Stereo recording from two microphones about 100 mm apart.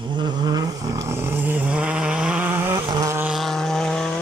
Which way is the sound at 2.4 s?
20° right (ahead or behind).